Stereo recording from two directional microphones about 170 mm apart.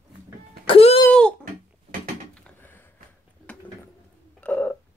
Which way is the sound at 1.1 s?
5° left (ahead or behind).